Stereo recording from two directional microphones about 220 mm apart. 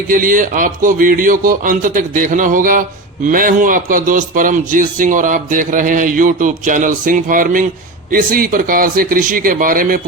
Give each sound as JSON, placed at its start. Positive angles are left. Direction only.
{"t": 0.1, "sound": "a man's voice", "side_deg": -40}